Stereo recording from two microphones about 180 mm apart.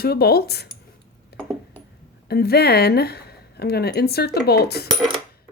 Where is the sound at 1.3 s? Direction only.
60° left (ahead or behind).